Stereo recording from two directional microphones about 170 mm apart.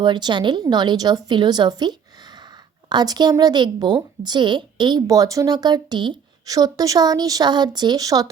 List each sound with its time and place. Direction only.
0.0 s a woman's voice: 25° right (ahead or behind)